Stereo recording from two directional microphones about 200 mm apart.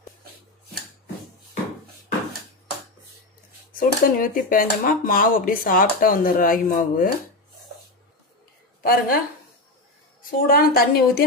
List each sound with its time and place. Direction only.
3.8 s speech: 45° left (ahead or behind)
8.8 s a woman's voice: 50° left (ahead or behind)
10.4 s speech: 50° left (ahead or behind)